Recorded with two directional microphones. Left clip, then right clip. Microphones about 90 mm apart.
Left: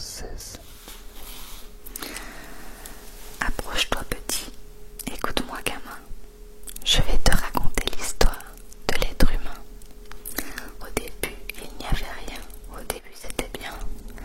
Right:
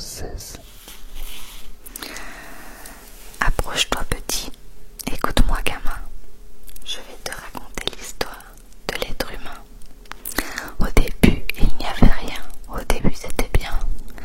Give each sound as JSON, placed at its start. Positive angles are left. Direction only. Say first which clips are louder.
{"t": 0.0, "sound": "speech", "louder": "right 3 dB", "side_deg": -5}
{"t": 0.8, "sound": "biting", "louder": "right 2 dB", "side_deg": -20}
{"t": 2.0, "sound": "whispering", "louder": "right 3 dB", "side_deg": 0}
{"t": 6.8, "sound": "whispering", "louder": "left 8 dB", "side_deg": 25}
{"t": 7.4, "sound": "whispering", "louder": "left 2 dB", "side_deg": 5}
{"t": 10.0, "sound": "whispering", "louder": "right 8 dB", "side_deg": -20}